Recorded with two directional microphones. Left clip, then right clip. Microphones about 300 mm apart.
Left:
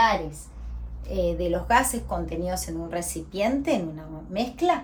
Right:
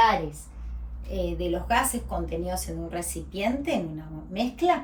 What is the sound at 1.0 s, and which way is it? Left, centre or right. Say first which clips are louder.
A woman's voice: left 4 dB; centre.